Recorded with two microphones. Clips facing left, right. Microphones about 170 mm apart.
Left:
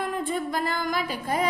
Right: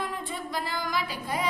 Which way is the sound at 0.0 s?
50° left (ahead or behind).